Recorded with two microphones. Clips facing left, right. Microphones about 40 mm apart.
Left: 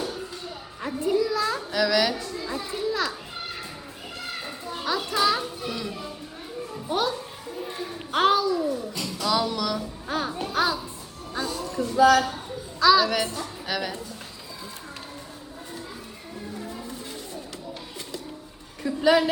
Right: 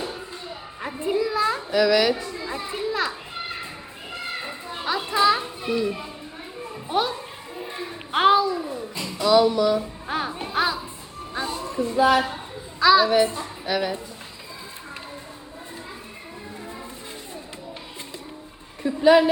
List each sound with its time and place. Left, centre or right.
0.8 s a child's voice: right
2.8 s children playing: right
6.8 s a child's voice: right
10.1 s a child's voice: right
18.8 s a woman's voice: right